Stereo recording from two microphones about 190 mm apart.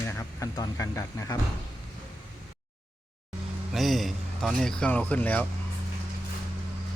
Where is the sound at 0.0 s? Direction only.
10° left (ahead or behind).